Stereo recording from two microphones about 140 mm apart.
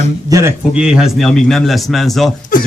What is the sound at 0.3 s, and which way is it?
Speech, 20° right (ahead or behind).